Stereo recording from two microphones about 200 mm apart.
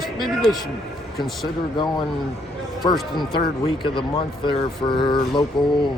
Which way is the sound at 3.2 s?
25° left (ahead or behind).